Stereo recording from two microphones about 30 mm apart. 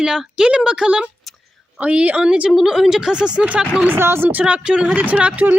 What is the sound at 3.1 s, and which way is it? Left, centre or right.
Speech, right.